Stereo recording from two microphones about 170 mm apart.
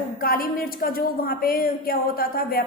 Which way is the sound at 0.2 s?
60° left (ahead or behind).